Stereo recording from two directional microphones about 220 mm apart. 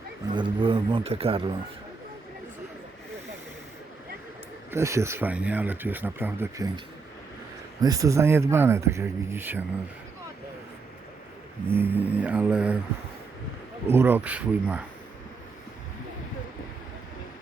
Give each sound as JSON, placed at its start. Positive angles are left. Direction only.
{"t": 0.3, "sound": "speech", "side_deg": -20}
{"t": 4.7, "sound": "speech", "side_deg": -10}
{"t": 7.8, "sound": "speech", "side_deg": -15}
{"t": 11.7, "sound": "speech", "side_deg": -10}
{"t": 13.8, "sound": "speech", "side_deg": -10}